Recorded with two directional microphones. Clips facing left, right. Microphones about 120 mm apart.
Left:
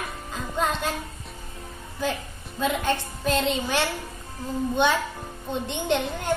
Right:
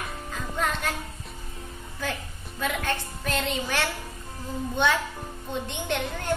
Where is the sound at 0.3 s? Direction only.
20° left (ahead or behind).